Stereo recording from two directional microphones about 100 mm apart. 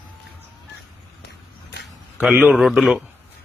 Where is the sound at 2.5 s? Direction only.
Centre (ahead or behind).